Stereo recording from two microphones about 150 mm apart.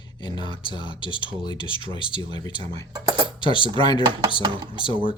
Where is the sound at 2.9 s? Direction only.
25° right (ahead or behind).